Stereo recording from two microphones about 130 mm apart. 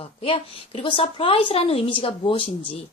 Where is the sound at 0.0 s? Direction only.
45° left (ahead or behind).